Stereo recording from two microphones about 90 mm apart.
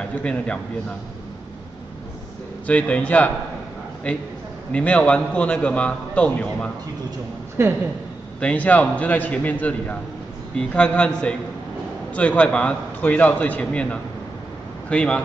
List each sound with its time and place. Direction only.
0.2 s a man's voice: 10° left (ahead or behind)
2.6 s a man's voice: 15° left (ahead or behind)
4.7 s a man's voice: 15° left (ahead or behind)
7.6 s a woman's voice: 30° right (ahead or behind)
8.4 s a man's voice: 15° left (ahead or behind)